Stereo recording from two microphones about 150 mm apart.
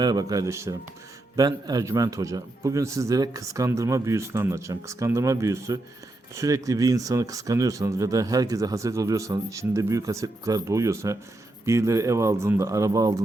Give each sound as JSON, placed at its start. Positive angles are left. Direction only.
{"t": 0.0, "sound": "speech", "side_deg": -25}